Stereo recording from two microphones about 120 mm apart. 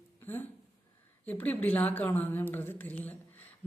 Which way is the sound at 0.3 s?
15° left (ahead or behind).